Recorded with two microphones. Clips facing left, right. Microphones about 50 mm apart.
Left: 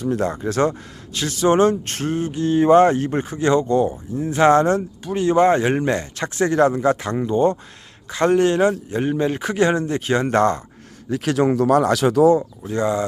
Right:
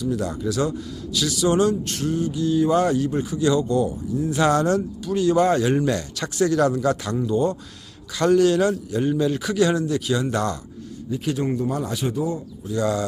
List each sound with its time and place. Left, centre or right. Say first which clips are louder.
0.0 s speech: left 3 dB; left
11.1 s speech: left 6 dB; left
12.8 s speech: left 2 dB; left